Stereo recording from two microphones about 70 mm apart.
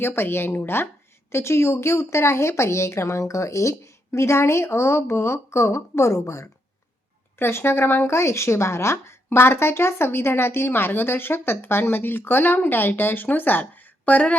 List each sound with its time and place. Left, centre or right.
0.0 s speech: left
7.3 s speech: left; by 14.3 s centre